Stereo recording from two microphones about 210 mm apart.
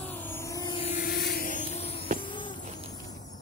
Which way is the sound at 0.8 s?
30° left (ahead or behind).